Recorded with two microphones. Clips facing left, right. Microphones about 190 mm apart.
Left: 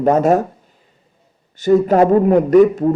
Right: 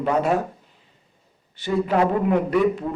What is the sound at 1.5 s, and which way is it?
A man's voice, 45° left (ahead or behind).